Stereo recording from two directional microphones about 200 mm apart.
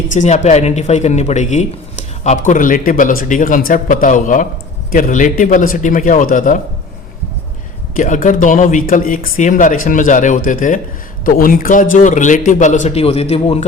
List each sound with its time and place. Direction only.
0.1 s speech: 35° left (ahead or behind)
7.9 s speech: 40° left (ahead or behind)